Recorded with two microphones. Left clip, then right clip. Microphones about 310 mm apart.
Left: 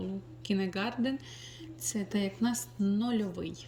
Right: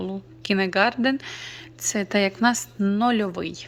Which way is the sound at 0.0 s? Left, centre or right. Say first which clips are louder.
Right 9 dB; centre.